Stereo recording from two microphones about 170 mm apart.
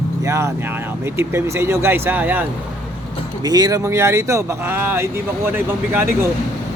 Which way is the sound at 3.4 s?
20° right (ahead or behind).